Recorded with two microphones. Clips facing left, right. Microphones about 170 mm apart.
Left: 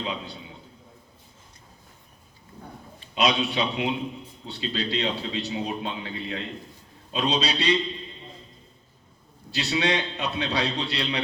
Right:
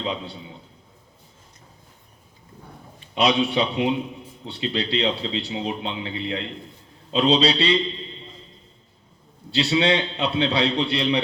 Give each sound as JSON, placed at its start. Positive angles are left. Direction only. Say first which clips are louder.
{"t": 3.2, "sound": "a man's voice", "louder": "right 4 dB", "side_deg": -30}
{"t": 9.5, "sound": "a man's voice", "louder": "right 5 dB", "side_deg": -30}